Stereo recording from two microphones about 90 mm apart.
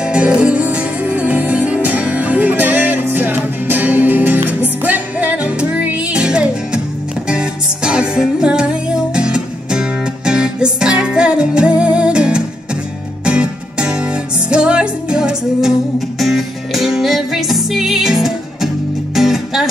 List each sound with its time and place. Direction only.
0.0 s music: 15° right (ahead or behind)